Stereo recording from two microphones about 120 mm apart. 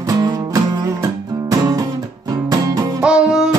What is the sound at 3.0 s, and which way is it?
Music, 5° right (ahead or behind).